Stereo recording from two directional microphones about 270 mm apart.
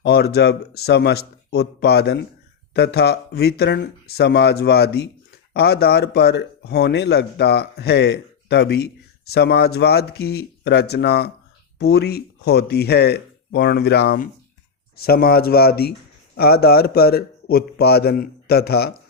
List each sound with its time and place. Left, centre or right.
0.0 s a man's voice: left